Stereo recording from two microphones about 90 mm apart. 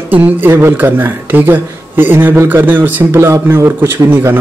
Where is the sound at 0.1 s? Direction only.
20° right (ahead or behind).